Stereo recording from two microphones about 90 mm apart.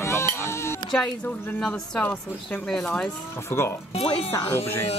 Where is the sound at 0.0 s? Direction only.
30° left (ahead or behind).